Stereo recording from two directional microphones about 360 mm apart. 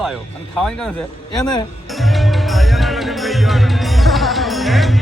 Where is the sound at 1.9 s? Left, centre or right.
Centre.